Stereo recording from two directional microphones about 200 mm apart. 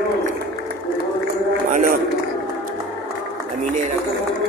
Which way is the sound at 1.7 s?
45° right (ahead or behind).